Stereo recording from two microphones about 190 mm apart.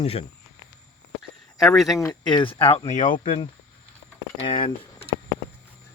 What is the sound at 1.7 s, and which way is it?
Speech, centre (ahead or behind).